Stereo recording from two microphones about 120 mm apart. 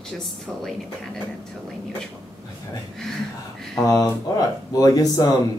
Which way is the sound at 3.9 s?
30° left (ahead or behind).